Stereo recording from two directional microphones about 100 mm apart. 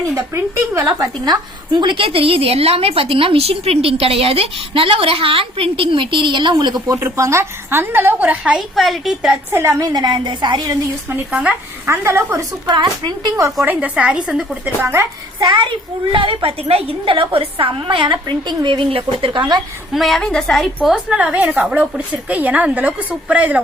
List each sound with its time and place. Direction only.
0.0 s a woman's voice: 25° right (ahead or behind)
0.9 s a woman's voice: 40° right (ahead or behind); by 8.5 s 15° right (ahead or behind)
8.5 s a woman's voice: centre (ahead or behind)
9.5 s a woman's voice: 20° right (ahead or behind)
9.7 s a woman's voice: 40° right (ahead or behind)
11.1 s a woman's voice: 15° right (ahead or behind)
11.9 s a woman's voice: 25° right (ahead or behind)
12.7 s a woman's voice: 50° right (ahead or behind)
13.7 s a woman's voice: 15° right (ahead or behind)
15.4 s a woman's voice: 50° right (ahead or behind)
19.9 s a woman's voice: centre (ahead or behind)
20.8 s a woman's voice: 10° right (ahead or behind)